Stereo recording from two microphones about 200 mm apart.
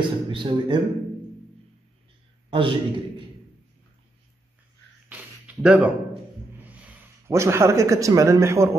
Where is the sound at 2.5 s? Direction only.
25° right (ahead or behind).